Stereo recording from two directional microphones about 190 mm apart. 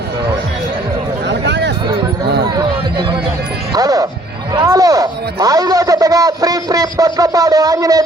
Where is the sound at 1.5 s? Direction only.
60° right (ahead or behind).